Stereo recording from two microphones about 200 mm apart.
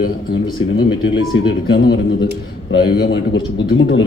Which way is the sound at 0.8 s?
60° left (ahead or behind).